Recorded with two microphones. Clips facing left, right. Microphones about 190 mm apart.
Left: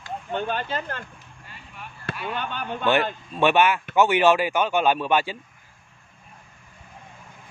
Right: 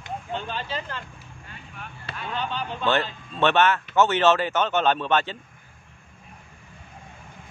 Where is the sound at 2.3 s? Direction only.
55° left (ahead or behind).